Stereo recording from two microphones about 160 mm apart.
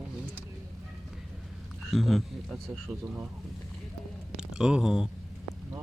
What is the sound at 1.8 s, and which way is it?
Speech, centre (ahead or behind).